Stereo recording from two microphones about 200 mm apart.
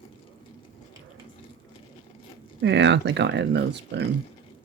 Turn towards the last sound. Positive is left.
turn(degrees=-60)  # may be behind; listen again after turning